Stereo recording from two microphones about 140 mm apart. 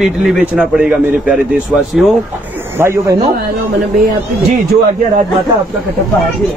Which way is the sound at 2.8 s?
20° right (ahead or behind).